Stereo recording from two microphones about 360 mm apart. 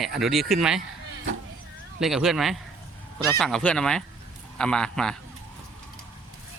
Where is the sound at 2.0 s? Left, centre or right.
Centre.